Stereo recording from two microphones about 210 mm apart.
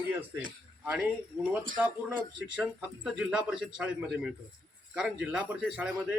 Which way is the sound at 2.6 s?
5° right (ahead or behind).